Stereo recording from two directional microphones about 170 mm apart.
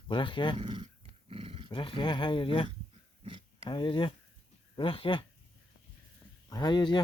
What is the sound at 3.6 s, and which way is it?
Speech, 30° left (ahead or behind).